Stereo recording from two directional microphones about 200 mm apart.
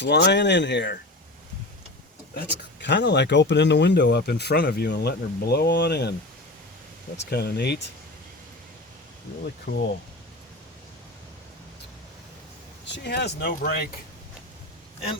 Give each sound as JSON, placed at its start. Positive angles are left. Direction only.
{"t": 0.0, "sound": "speech", "side_deg": 60}
{"t": 2.8, "sound": "speech", "side_deg": 60}
{"t": 7.2, "sound": "speech", "side_deg": 55}
{"t": 9.7, "sound": "speech", "side_deg": 55}
{"t": 12.8, "sound": "speech", "side_deg": 60}